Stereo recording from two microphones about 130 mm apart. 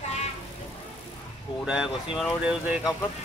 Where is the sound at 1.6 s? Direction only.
5° right (ahead or behind).